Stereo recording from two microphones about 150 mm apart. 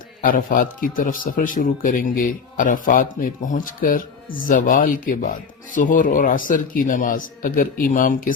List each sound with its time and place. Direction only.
0.2 s a man's voice: 65° left (ahead or behind)